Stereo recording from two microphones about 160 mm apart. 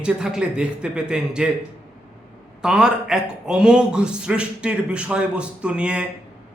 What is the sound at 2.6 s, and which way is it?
A man's voice, 5° right (ahead or behind).